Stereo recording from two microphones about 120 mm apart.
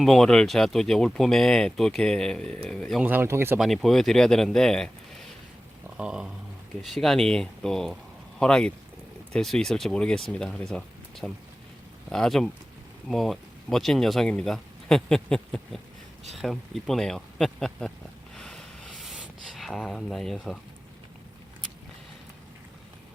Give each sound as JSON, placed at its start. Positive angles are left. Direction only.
{"t": 0.0, "sound": "speech", "side_deg": 5}
{"t": 3.0, "sound": "speech", "side_deg": -15}
{"t": 3.6, "sound": "speech", "side_deg": 0}
{"t": 6.0, "sound": "speech", "side_deg": -5}
{"t": 18.3, "sound": "a sound", "side_deg": 5}